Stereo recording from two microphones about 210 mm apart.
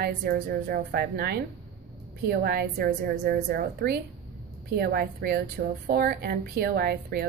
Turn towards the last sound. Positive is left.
turn(degrees=-45)  # may be behind; listen again after turning